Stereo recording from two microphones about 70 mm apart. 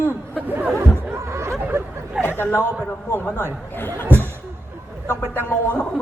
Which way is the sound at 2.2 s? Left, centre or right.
Left.